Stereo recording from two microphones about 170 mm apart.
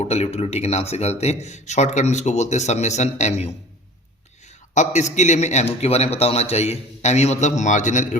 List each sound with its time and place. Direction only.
0.0 s a man's voice: 40° left (ahead or behind)
4.7 s a man's voice: 45° left (ahead or behind)